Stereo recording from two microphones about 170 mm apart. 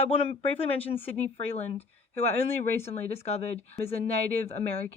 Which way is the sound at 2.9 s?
40° left (ahead or behind).